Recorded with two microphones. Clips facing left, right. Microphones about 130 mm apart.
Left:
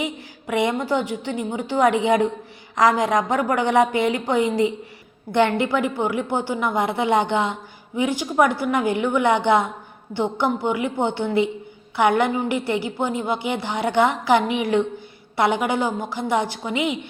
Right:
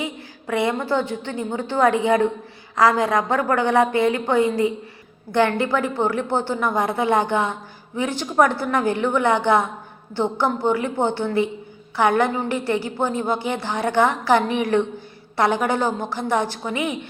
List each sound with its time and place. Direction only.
0.5 s a woman's voice: 20° left (ahead or behind)
10.7 s a woman's voice: 15° left (ahead or behind)